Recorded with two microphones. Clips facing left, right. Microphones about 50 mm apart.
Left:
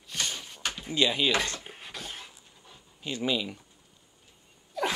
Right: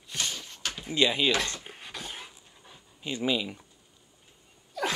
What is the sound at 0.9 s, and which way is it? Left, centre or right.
Speech, right.